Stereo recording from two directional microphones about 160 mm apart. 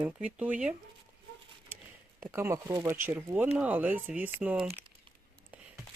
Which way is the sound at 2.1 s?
15° right (ahead or behind).